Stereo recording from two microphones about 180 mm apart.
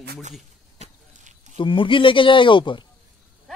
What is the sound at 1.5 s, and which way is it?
Speech, 30° left (ahead or behind).